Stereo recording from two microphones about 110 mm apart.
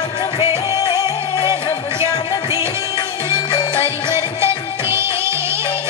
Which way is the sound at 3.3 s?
40° left (ahead or behind).